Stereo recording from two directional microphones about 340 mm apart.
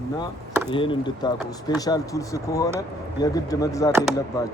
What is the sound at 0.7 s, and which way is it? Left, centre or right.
Speech, centre.